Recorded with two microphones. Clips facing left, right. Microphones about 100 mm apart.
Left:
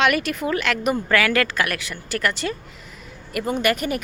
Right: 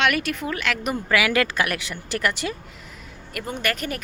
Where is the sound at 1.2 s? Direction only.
15° right (ahead or behind).